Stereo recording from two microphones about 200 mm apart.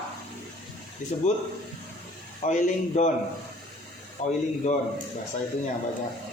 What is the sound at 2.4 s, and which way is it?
Speech, 35° left (ahead or behind).